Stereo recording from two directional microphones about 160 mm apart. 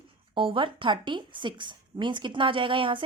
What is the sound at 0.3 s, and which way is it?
A woman's voice, 30° right (ahead or behind).